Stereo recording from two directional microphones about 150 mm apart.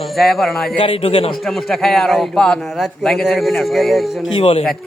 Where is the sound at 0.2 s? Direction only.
Centre (ahead or behind).